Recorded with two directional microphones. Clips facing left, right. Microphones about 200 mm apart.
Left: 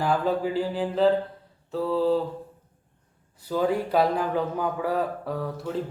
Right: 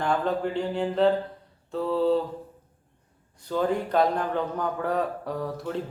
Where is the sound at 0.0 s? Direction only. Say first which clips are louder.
Left 1 dB; 5° left (ahead or behind).